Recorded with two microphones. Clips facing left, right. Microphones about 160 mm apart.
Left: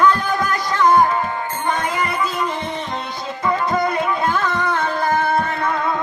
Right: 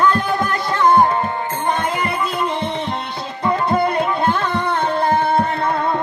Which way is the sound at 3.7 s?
30° right (ahead or behind).